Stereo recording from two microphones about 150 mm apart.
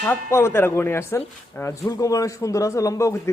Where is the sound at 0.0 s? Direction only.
15° left (ahead or behind).